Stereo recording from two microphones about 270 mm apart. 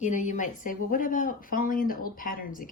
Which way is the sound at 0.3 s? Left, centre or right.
Left.